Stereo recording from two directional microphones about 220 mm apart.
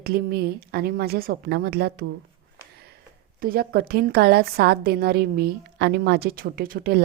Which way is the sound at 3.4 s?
45° right (ahead or behind).